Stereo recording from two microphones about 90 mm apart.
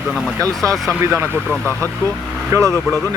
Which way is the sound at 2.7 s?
5° left (ahead or behind).